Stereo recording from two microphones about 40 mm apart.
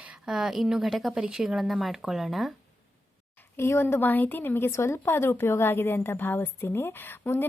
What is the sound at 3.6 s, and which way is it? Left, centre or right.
Speech, left.